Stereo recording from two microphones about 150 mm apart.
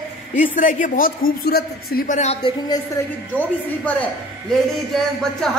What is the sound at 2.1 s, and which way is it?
Speech, 45° left (ahead or behind).